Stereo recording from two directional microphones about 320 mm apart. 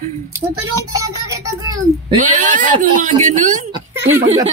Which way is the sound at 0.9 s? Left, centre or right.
Centre.